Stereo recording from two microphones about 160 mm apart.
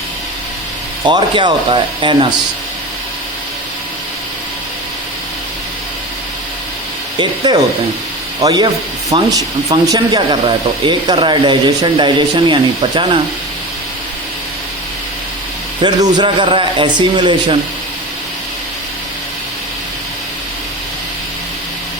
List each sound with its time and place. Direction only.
1.0 s speech: 30° right (ahead or behind)
7.2 s speech: 30° right (ahead or behind)
15.8 s a man's voice: 30° right (ahead or behind)